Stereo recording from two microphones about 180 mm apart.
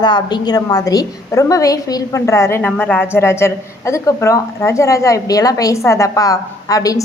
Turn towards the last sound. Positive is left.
turn(degrees=20)  # may be behind; listen again after turning